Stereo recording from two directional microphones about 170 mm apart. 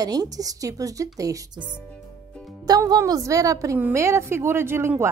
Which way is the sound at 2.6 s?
20° right (ahead or behind).